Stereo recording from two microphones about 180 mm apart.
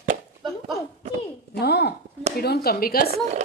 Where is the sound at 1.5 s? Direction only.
65° left (ahead or behind).